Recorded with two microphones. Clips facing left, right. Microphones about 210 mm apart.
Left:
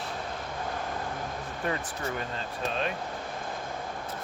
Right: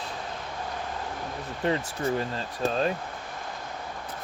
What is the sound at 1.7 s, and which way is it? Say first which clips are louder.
Speech: right 6 dB; 30° right (ahead or behind).